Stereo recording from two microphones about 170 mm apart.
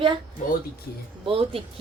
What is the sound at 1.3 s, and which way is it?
Speech, 35° right (ahead or behind).